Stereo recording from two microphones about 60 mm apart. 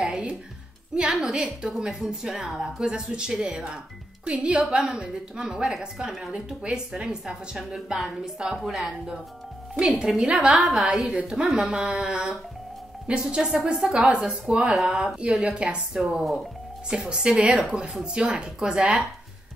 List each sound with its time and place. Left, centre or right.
0.0 s music: centre
1.1 s a woman's voice: centre
9.8 s a woman's voice: centre
10.9 s a woman's voice: centre